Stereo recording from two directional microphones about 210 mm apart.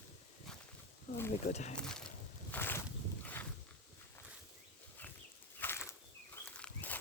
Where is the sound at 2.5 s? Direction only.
10° left (ahead or behind).